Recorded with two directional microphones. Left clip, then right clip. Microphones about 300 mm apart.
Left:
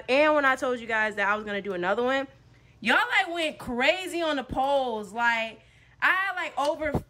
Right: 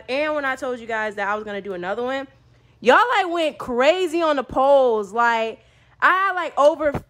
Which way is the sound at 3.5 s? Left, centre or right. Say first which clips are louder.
Right 9 dB; left.